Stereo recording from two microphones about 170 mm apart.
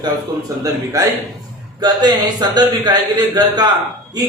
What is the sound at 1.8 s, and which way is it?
Speech, 25° right (ahead or behind).